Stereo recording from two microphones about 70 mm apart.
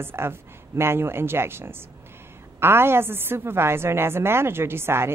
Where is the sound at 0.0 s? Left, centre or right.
Right.